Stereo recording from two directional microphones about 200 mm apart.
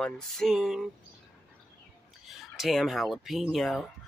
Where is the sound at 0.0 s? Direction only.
Centre (ahead or behind).